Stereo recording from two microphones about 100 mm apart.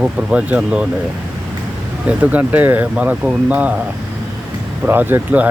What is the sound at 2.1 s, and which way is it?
Speech, 15° right (ahead or behind).